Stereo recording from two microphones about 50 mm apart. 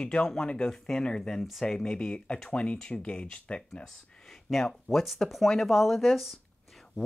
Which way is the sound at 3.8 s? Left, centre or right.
Centre.